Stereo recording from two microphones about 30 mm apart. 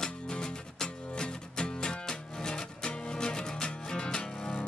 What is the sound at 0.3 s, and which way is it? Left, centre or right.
Music, left.